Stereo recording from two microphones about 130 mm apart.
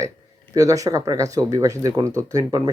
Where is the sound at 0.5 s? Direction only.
25° right (ahead or behind).